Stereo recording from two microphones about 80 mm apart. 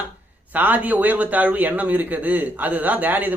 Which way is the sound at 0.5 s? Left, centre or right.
Right.